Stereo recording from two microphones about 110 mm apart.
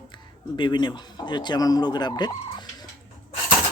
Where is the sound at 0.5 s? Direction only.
45° left (ahead or behind).